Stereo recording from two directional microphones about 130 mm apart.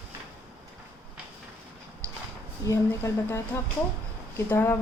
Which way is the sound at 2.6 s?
25° left (ahead or behind).